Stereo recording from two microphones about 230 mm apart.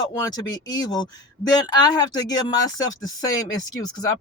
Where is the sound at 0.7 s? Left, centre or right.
Centre.